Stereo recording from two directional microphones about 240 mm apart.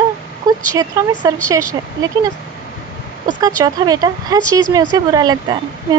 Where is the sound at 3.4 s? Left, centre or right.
Centre.